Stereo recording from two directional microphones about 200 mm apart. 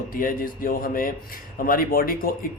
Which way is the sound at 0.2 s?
45° left (ahead or behind).